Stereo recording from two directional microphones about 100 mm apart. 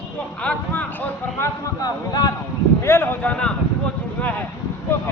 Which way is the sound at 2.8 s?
25° left (ahead or behind).